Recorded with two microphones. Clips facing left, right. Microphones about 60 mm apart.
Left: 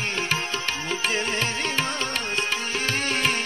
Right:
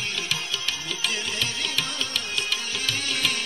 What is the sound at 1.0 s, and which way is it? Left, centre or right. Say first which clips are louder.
Music: left 3 dB; left.